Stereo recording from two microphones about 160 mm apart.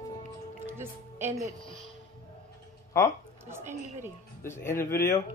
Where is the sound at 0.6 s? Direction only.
15° right (ahead or behind).